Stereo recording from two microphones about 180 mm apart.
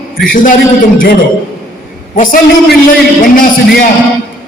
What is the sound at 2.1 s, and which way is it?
A man's voice, 45° left (ahead or behind).